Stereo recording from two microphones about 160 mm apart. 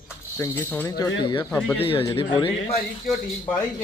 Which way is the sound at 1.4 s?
10° left (ahead or behind).